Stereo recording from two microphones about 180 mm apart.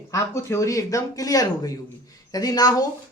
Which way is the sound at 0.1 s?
15° left (ahead or behind).